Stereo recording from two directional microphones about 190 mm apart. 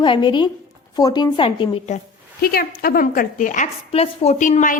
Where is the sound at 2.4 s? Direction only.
50° left (ahead or behind).